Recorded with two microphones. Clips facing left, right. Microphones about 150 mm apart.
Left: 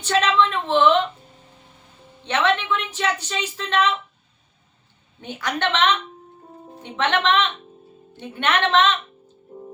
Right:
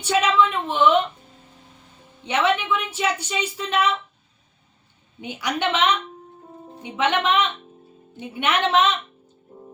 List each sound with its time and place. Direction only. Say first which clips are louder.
0.0 s a woman's voice: even; 10° right (ahead or behind)
2.2 s a woman's voice: even; 10° right (ahead or behind)
5.2 s a woman's voice: even; 10° right (ahead or behind)